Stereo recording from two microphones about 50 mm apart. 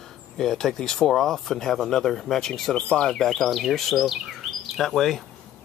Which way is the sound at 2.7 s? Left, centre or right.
Left.